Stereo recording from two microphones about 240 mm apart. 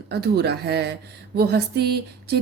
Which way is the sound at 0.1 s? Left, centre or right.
Right.